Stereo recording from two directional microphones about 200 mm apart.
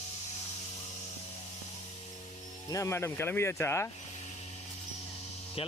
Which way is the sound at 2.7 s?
15° left (ahead or behind).